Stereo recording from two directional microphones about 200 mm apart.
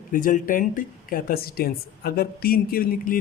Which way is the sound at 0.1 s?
45° left (ahead or behind).